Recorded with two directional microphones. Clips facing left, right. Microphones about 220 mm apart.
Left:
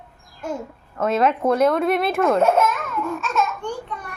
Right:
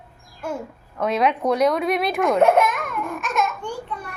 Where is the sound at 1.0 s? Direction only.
Centre (ahead or behind).